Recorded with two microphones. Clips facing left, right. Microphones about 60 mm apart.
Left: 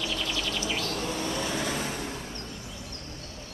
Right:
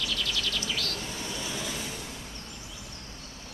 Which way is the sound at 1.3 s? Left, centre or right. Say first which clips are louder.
Left 5 dB; left.